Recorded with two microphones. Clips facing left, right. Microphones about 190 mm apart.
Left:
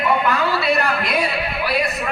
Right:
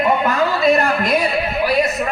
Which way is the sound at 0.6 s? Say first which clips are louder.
Right 5 dB; 45° right (ahead or behind).